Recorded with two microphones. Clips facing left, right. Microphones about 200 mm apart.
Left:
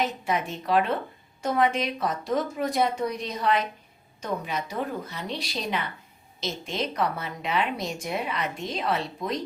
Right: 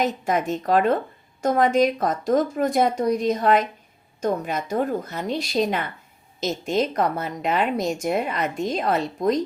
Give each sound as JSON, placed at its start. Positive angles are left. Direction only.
{"t": 0.0, "sound": "a woman's voice", "side_deg": -45}